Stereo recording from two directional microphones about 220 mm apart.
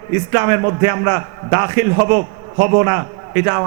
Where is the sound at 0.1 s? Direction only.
15° right (ahead or behind).